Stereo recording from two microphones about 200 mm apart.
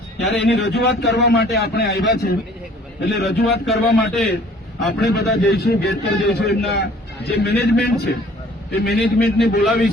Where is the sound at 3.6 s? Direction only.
Centre (ahead or behind).